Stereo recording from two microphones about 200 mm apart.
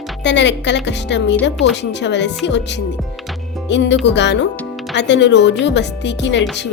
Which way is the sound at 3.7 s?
60° left (ahead or behind).